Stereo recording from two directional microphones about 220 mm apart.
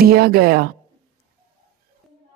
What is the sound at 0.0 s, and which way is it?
Speech, 45° right (ahead or behind).